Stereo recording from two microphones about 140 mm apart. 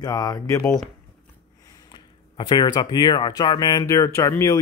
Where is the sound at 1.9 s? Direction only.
30° left (ahead or behind).